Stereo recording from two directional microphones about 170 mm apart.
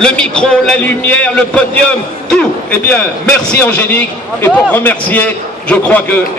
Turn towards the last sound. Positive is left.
turn(degrees=10)  # may be behind; listen again after turning